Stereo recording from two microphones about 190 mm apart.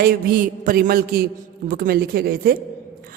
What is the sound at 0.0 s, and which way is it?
A woman's voice, 50° right (ahead or behind).